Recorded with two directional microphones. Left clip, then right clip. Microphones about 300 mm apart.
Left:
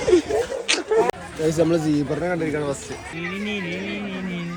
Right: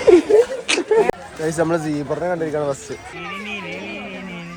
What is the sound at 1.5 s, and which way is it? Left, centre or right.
Speech, centre.